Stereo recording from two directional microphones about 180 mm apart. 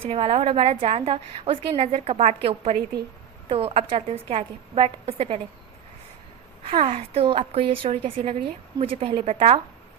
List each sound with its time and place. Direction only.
0.0 s a woman's voice: 35° right (ahead or behind)
6.8 s speech: 45° right (ahead or behind)
7.3 s a woman's voice: 30° right (ahead or behind)